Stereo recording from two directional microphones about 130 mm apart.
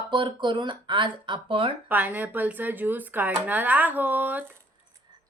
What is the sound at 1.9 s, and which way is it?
Speech, 15° right (ahead or behind).